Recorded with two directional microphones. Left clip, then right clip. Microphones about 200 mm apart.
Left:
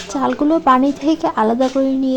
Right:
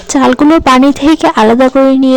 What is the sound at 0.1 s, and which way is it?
A woman's voice, 45° right (ahead or behind).